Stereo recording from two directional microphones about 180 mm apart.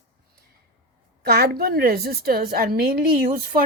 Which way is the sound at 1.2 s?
60° right (ahead or behind).